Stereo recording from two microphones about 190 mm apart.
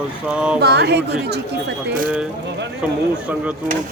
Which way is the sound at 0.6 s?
60° right (ahead or behind).